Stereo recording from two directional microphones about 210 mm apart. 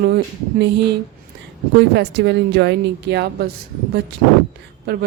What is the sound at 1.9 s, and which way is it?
Speech, 55° right (ahead or behind).